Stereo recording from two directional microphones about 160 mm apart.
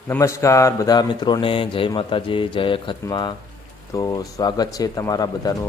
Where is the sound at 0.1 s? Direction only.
15° left (ahead or behind).